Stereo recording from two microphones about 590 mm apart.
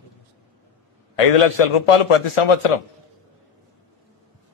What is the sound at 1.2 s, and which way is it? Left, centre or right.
A man's voice, left.